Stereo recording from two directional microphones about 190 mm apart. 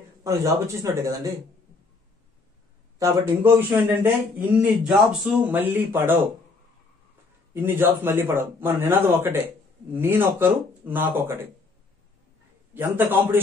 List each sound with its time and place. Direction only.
0.2 s a man's voice: 15° right (ahead or behind)
3.0 s a man's voice: 10° right (ahead or behind)
7.5 s a man's voice: 10° right (ahead or behind)
12.7 s a man's voice: 10° right (ahead or behind)